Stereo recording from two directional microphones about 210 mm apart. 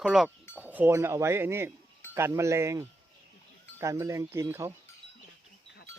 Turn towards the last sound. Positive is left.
turn(degrees=-15)  # may be behind; listen again after turning